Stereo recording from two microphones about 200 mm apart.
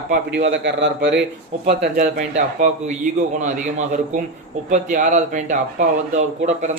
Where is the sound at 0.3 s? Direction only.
65° right (ahead or behind).